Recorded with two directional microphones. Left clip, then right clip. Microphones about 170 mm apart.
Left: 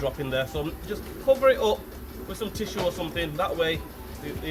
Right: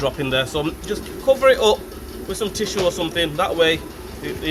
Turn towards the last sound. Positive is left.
turn(degrees=-25)  # may be behind; listen again after turning